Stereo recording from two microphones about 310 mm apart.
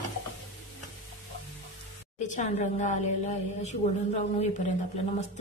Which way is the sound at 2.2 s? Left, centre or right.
Left.